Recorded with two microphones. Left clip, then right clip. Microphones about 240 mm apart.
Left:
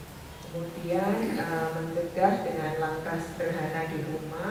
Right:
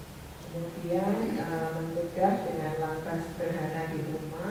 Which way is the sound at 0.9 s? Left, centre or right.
Centre.